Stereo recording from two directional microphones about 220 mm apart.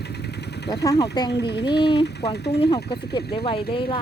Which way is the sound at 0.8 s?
15° left (ahead or behind).